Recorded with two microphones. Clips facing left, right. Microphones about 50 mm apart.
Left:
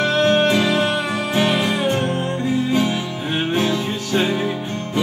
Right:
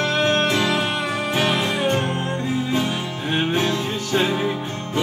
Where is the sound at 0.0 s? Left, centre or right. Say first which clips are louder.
Left 3 dB; centre.